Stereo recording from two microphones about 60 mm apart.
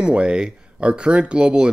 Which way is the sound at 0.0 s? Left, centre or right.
Centre.